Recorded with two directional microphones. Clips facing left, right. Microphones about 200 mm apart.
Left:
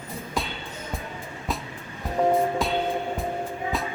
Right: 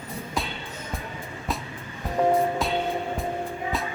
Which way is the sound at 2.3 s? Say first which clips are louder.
Even; centre (ahead or behind).